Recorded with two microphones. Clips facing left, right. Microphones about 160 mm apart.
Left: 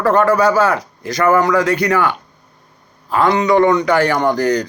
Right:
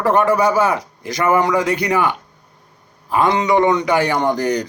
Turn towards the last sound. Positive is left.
turn(degrees=-20)  # may be behind; listen again after turning